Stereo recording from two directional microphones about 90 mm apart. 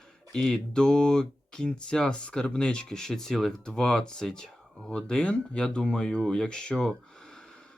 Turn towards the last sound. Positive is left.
turn(degrees=10)  # may be behind; listen again after turning